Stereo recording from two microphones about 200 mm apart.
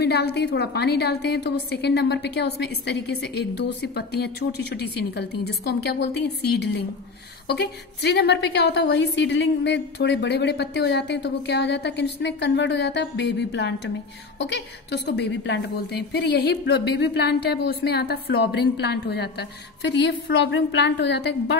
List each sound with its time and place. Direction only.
0.0 s a woman's voice: 55° left (ahead or behind)